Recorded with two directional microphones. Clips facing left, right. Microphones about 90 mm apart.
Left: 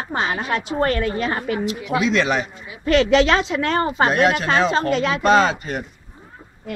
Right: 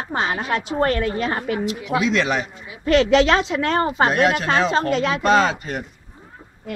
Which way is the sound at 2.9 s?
25° right (ahead or behind).